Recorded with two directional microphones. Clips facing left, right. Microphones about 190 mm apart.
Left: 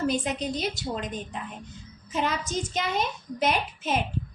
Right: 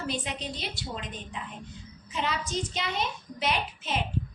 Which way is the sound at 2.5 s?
45° left (ahead or behind).